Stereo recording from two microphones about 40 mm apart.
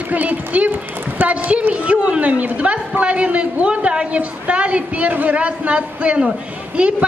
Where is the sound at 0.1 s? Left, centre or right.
Right.